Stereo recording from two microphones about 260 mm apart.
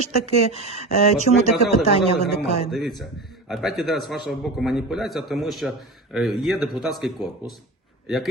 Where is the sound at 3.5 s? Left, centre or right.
Centre.